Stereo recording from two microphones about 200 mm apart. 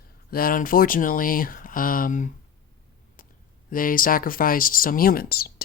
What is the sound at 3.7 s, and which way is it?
Speech, 45° left (ahead or behind).